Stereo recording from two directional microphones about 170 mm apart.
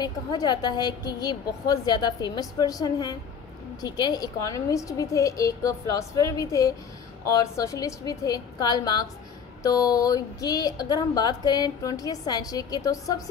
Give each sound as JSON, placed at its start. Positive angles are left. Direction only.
{"t": 0.0, "sound": "a woman's voice", "side_deg": 25}